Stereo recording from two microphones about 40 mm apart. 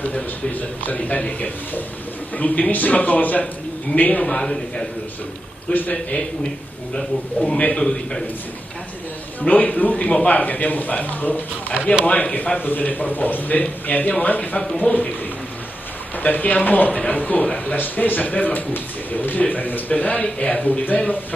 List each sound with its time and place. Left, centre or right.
0.0 s a man's voice: left
2.3 s speech: left
4.2 s a man's voice: left
5.7 s speech: left
7.4 s a man's voice: left
9.4 s speech: left
12.1 s speech: left
12.5 s a man's voice: left
14.9 s speech: left
16.2 s a man's voice: left